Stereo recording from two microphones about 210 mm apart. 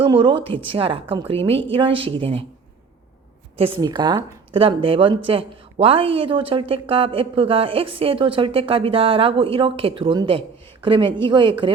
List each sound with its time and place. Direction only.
0.0 s speech: 25° right (ahead or behind)
3.6 s speech: 20° right (ahead or behind)